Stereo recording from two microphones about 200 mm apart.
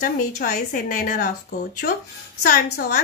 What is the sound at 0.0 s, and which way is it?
A woman's voice, 45° left (ahead or behind).